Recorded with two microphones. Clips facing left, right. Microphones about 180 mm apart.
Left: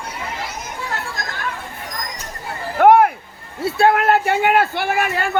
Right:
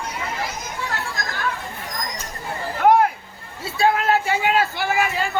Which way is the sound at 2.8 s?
60° left (ahead or behind).